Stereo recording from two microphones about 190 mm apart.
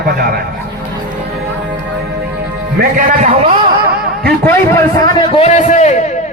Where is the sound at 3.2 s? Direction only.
35° right (ahead or behind).